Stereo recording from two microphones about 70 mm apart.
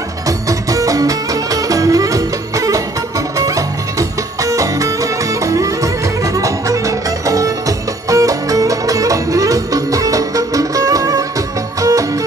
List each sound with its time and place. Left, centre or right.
0.3 s music: right